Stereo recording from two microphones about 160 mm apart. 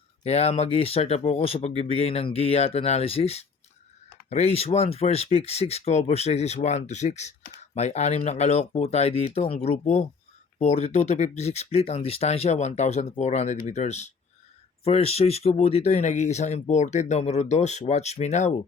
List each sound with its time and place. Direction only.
0.2 s speech: 40° left (ahead or behind)